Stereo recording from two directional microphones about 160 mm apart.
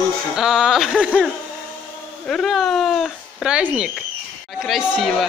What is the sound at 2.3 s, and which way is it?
Speech, centre (ahead or behind).